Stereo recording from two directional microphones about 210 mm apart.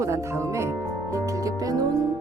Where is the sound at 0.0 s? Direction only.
15° right (ahead or behind).